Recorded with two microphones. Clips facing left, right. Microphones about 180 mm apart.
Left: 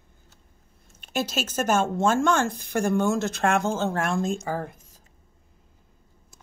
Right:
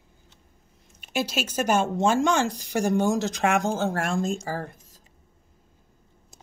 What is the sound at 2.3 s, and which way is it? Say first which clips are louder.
Speech: even; 55° left (ahead or behind).